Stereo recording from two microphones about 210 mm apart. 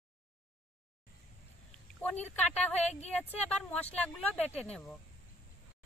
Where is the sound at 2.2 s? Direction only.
5° left (ahead or behind).